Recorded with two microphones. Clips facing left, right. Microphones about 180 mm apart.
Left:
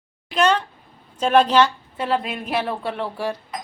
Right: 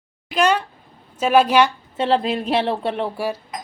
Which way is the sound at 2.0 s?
30° right (ahead or behind).